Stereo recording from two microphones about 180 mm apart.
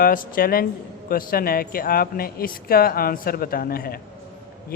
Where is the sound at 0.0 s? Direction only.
50° left (ahead or behind).